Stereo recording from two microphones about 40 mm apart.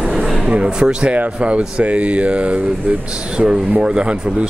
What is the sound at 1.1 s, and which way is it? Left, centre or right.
Mantra, right.